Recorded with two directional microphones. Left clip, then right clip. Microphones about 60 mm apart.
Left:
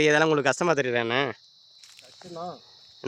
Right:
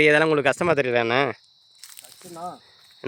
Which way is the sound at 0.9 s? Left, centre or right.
Right.